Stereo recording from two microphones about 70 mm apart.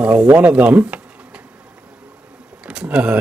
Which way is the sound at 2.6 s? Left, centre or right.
Centre.